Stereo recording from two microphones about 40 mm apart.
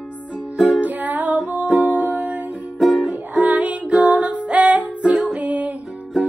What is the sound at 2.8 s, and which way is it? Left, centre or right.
Music, centre.